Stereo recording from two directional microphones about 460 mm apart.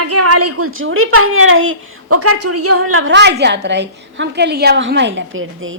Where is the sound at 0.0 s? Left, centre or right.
Right.